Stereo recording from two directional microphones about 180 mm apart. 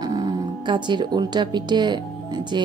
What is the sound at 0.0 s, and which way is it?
Speech, 20° right (ahead or behind).